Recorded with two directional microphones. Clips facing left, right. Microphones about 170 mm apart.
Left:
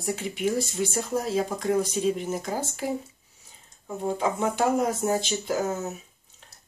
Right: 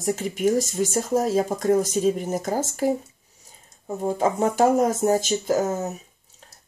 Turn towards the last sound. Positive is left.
turn(degrees=-45)  # may be behind; listen again after turning